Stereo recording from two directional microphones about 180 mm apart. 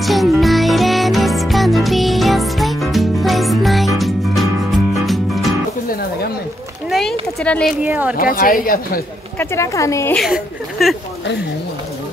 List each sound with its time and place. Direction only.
0.0 s music: centre (ahead or behind)
6.9 s a sound: centre (ahead or behind)
7.8 s speech: 10° right (ahead or behind)
8.2 s speech: 55° left (ahead or behind)
9.4 s speech: 15° left (ahead or behind)
10.1 s a woman's voice: centre (ahead or behind)